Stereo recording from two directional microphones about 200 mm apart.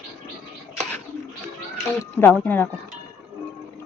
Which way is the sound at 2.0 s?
10° left (ahead or behind).